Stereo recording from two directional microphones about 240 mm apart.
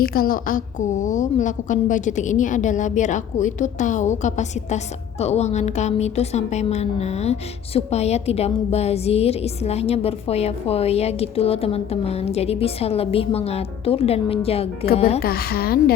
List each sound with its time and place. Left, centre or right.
0.0 s a woman's voice: left
15.2 s a woman's voice: left